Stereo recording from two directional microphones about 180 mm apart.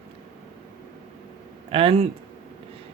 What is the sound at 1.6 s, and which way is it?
Speech, 30° right (ahead or behind).